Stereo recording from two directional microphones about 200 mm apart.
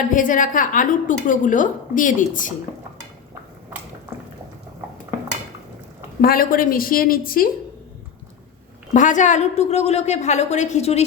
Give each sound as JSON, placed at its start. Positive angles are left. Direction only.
{"t": 0.1, "sound": "a woman's voice", "side_deg": 40}
{"t": 6.2, "sound": "a woman's voice", "side_deg": 45}
{"t": 8.9, "sound": "a woman's voice", "side_deg": 40}